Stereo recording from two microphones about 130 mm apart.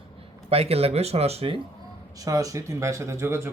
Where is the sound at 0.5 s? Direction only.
50° right (ahead or behind).